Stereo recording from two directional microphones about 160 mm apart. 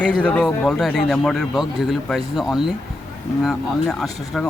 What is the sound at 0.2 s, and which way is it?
A man's voice, 5° left (ahead or behind).